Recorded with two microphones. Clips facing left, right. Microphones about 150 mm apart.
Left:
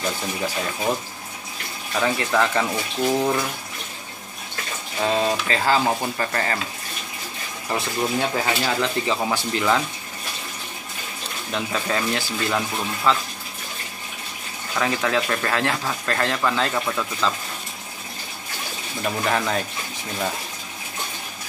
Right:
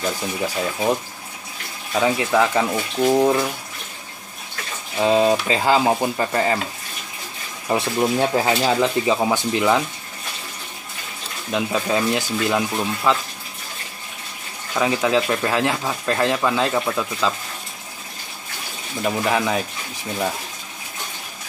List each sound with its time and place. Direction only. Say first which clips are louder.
2.0 s speech: right 3 dB; 10° right (ahead or behind)
5.0 s speech: right 5 dB; 15° right (ahead or behind)
7.7 s speech: right 4 dB; 25° right (ahead or behind)
11.5 s speech: right 4 dB; 15° right (ahead or behind)
14.8 s speech: right 4 dB; 15° right (ahead or behind)
19.0 s speech: right 3 dB; 10° right (ahead or behind)